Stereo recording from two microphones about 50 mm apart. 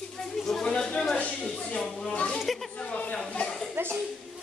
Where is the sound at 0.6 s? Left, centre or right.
Centre.